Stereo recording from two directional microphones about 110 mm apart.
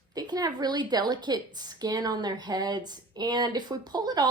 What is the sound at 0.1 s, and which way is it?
A woman's voice, 35° right (ahead or behind).